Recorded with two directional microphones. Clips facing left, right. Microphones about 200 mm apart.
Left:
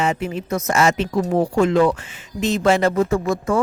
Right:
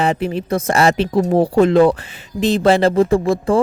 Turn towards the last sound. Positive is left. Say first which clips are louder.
# right 5 dB
turn(degrees=-30)  # may be behind; listen again after turning